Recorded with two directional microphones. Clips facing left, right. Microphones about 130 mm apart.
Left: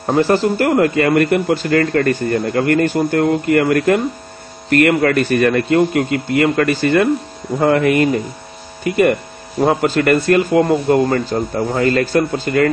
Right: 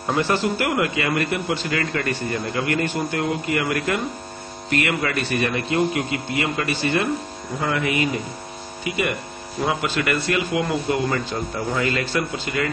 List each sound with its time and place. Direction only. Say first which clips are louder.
0.1 s a man's voice: left 7 dB; 40° left (ahead or behind)